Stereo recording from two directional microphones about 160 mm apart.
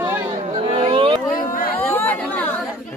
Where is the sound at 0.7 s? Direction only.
35° right (ahead or behind).